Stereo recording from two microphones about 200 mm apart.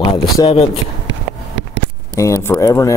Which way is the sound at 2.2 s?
15° left (ahead or behind).